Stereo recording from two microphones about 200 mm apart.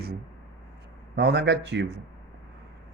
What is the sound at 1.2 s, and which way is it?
Speech, 60° right (ahead or behind).